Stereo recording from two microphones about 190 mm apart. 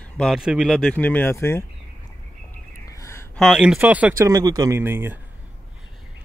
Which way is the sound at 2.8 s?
15° left (ahead or behind).